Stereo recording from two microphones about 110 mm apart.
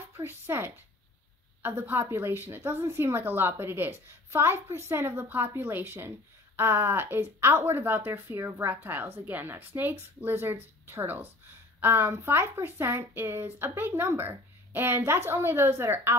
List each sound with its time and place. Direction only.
0.1 s a woman's voice: 25° right (ahead or behind)